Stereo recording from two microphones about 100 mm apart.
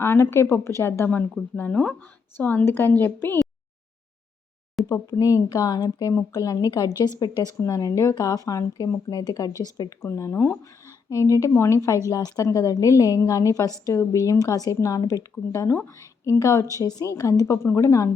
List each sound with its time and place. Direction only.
0.0 s a woman's voice: 25° left (ahead or behind)
4.9 s a woman's voice: 35° left (ahead or behind)
10.1 s a woman's voice: 30° left (ahead or behind)